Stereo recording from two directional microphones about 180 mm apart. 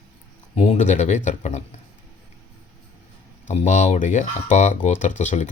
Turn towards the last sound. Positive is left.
turn(degrees=45)  # may be behind; listen again after turning